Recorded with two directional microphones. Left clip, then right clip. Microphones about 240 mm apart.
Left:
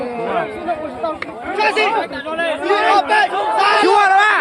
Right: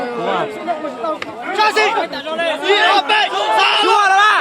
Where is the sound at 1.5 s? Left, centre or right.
Right.